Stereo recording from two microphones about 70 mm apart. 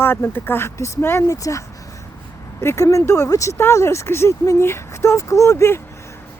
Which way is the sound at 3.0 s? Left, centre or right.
Left.